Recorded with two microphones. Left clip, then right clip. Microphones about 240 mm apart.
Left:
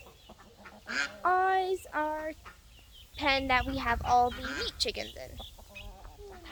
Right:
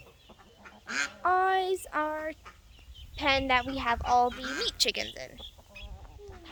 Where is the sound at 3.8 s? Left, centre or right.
Centre.